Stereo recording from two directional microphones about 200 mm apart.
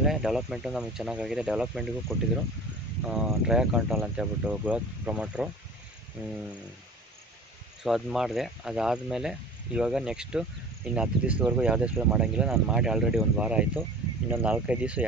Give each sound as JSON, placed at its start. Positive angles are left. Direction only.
{"t": 0.0, "sound": "speech", "side_deg": 0}
{"t": 6.2, "sound": "a sound", "side_deg": -10}
{"t": 7.8, "sound": "speech", "side_deg": 0}